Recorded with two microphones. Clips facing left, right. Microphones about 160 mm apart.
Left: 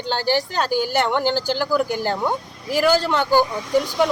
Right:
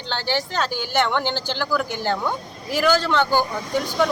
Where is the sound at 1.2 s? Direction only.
40° left (ahead or behind).